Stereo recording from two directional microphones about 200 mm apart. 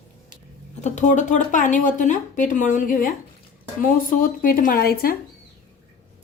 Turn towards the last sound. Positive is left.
turn(degrees=50)  # may be behind; listen again after turning